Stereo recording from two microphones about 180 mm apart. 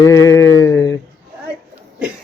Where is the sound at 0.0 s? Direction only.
20° left (ahead or behind).